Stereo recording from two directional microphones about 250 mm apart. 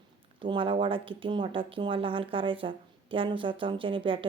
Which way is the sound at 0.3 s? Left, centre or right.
Centre.